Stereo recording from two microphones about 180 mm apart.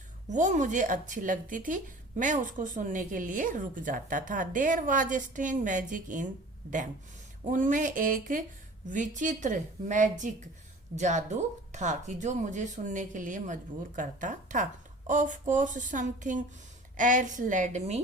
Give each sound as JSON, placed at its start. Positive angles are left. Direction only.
{"t": 0.3, "sound": "speech", "side_deg": -40}
{"t": 7.5, "sound": "speech", "side_deg": -45}